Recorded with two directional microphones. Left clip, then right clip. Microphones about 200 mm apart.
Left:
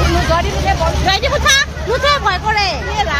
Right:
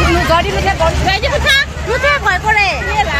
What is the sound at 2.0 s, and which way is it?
Vehicle, 25° left (ahead or behind).